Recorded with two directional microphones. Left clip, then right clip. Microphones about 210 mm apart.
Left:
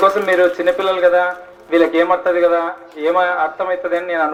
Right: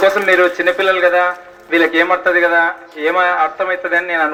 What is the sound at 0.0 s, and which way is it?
A man's voice, 55° left (ahead or behind).